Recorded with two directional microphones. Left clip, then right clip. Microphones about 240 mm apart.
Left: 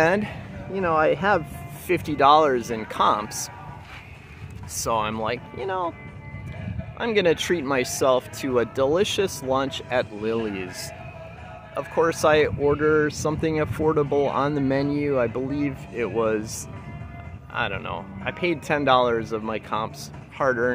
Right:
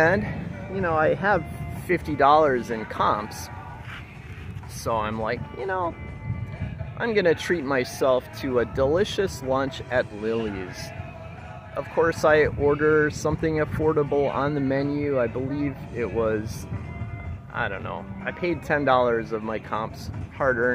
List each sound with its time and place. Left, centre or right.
0.0 s speech: centre
4.7 s speech: centre
7.0 s speech: centre
11.7 s speech: centre
17.6 s speech: centre